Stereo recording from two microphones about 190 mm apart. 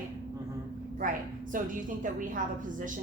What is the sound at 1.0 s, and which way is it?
A woman's voice, 45° right (ahead or behind).